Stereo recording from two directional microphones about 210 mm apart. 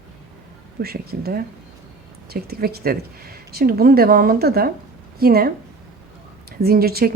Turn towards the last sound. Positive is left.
turn(degrees=-45)  # may be behind; listen again after turning